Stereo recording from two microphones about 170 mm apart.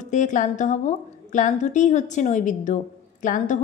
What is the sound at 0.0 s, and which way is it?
A woman's voice, 45° left (ahead or behind).